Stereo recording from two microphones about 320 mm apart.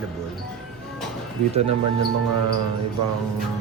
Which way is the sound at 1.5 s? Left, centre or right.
Centre.